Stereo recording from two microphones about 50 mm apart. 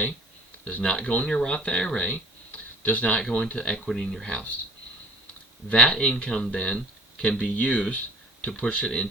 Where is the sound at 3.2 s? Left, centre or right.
Centre.